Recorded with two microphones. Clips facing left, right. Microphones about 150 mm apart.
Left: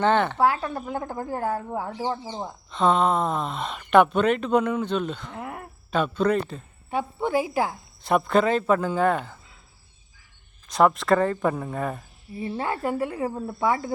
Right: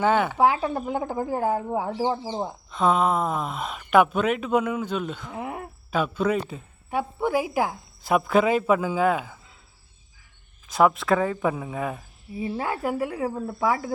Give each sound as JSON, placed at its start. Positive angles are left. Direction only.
{"t": 0.0, "sound": "a woman's voice", "side_deg": -5}
{"t": 2.6, "sound": "speech", "side_deg": -5}
{"t": 5.4, "sound": "a sound", "side_deg": -20}
{"t": 5.9, "sound": "a woman's voice", "side_deg": -5}
{"t": 10.7, "sound": "speech", "side_deg": 0}